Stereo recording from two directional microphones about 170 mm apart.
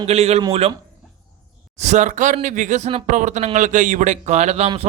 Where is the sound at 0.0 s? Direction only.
40° right (ahead or behind).